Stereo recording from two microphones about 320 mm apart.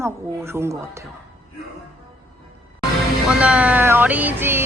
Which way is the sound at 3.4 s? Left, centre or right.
Centre.